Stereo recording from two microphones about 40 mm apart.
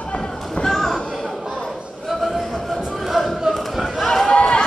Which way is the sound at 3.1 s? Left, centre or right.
Centre.